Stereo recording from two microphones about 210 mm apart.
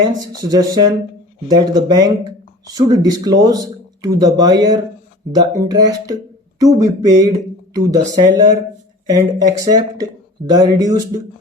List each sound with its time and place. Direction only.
0.0 s speech: 15° right (ahead or behind)